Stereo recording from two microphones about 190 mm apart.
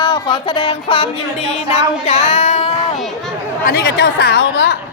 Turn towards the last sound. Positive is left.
turn(degrees=60)  # may be behind; listen again after turning